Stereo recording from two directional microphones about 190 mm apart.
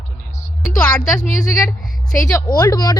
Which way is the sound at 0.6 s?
10° left (ahead or behind).